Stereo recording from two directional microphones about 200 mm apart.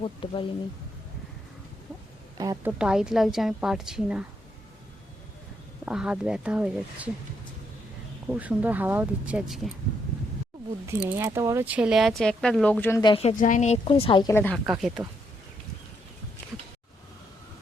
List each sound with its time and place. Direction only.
0.0 s a woman's voice: 25° left (ahead or behind)
2.4 s speech: 20° right (ahead or behind)
2.7 s speech: 5° right (ahead or behind)
5.8 s speech: 5° right (ahead or behind)
8.3 s speech: 5° right (ahead or behind)
11.0 s speech: 10° right (ahead or behind); by 13.0 s 10° left (ahead or behind)
13.0 s a woman's voice: 25° left (ahead or behind)
14.3 s speech: 10° left (ahead or behind)